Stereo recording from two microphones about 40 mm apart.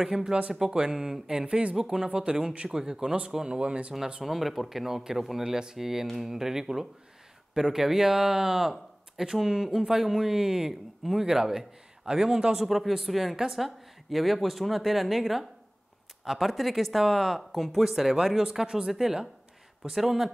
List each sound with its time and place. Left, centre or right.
0.0 s speech: centre
4.2 s speech: centre
12.6 s speech: centre